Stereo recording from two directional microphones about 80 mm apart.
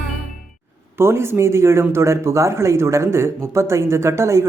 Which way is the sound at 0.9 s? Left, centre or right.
Right.